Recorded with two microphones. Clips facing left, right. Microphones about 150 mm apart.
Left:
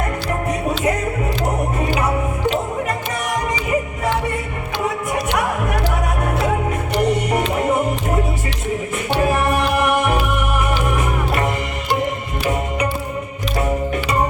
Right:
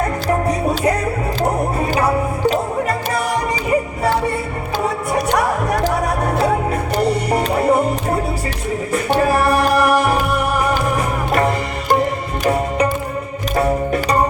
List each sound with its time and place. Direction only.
0.4 s music: 40° right (ahead or behind)
3.7 s music: 35° right (ahead or behind)
5.3 s music: 40° right (ahead or behind)
13.6 s music: 35° right (ahead or behind)